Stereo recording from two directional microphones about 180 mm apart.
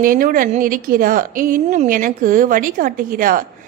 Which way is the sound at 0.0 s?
50° right (ahead or behind).